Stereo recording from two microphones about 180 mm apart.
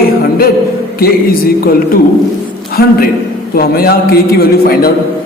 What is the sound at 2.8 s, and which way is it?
A man's voice, 55° left (ahead or behind).